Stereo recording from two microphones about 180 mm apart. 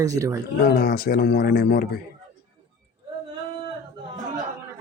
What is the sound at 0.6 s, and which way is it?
A man's voice, 60° left (ahead or behind).